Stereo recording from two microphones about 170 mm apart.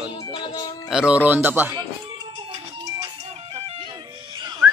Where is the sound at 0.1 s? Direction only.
30° left (ahead or behind).